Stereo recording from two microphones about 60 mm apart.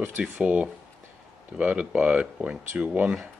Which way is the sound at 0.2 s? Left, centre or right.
Right.